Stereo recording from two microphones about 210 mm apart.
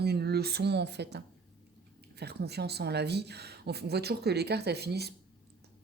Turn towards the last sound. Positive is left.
turn(degrees=-50)  # may be behind; listen again after turning